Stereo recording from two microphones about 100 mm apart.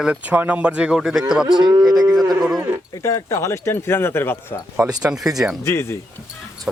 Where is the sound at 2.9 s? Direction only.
35° left (ahead or behind).